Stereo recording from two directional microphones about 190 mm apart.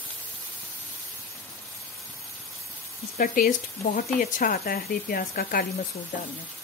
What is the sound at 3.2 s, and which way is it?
Speech, 45° left (ahead or behind).